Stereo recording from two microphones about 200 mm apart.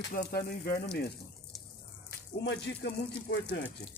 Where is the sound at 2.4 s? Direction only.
60° left (ahead or behind).